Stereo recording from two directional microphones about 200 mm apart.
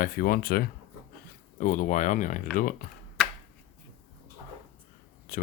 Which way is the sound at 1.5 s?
40° left (ahead or behind).